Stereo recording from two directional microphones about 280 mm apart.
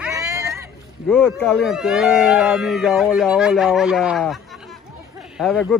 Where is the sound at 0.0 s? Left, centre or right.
Centre.